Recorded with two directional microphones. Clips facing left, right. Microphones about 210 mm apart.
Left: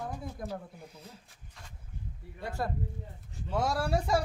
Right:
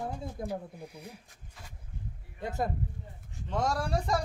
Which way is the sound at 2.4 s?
20° right (ahead or behind).